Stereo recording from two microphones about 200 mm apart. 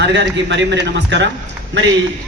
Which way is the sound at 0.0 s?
60° right (ahead or behind).